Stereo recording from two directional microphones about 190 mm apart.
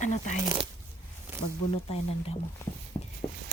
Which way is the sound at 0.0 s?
40° left (ahead or behind).